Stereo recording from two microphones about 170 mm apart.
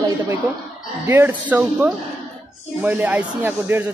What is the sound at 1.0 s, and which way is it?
Speech, 10° right (ahead or behind).